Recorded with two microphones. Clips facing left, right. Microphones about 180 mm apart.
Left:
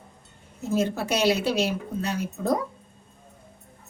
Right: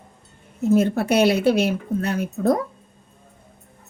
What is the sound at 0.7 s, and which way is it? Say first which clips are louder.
Speech: right 6 dB; 55° right (ahead or behind).